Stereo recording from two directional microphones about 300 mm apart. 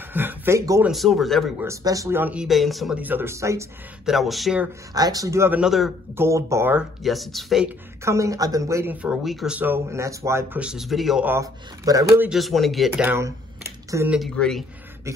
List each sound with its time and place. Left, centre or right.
0.1 s speech: centre
1.7 s speech: centre
4.9 s speech: centre